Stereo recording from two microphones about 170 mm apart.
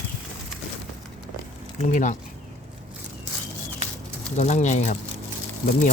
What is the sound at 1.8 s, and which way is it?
Speech, 45° left (ahead or behind).